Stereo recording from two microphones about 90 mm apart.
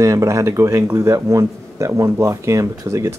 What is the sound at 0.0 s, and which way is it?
Speech, 35° right (ahead or behind).